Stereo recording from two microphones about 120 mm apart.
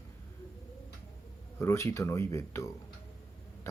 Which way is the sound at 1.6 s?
25° left (ahead or behind).